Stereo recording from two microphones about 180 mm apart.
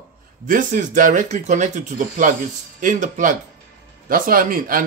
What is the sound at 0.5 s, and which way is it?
Speech, 45° right (ahead or behind).